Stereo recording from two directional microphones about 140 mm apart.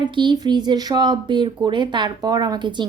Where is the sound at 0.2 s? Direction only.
30° right (ahead or behind).